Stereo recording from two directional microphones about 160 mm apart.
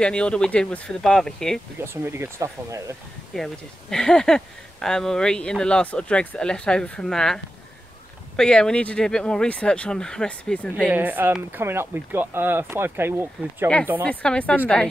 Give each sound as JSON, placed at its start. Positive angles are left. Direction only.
{"t": 0.0, "sound": "speech", "side_deg": 5}
{"t": 1.8, "sound": "speech", "side_deg": -15}
{"t": 3.3, "sound": "speech", "side_deg": 0}
{"t": 8.4, "sound": "speech", "side_deg": 5}
{"t": 10.9, "sound": "speech", "side_deg": -10}
{"t": 14.0, "sound": "speech", "side_deg": 5}